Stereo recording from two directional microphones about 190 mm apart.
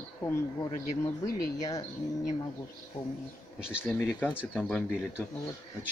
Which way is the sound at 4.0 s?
10° left (ahead or behind).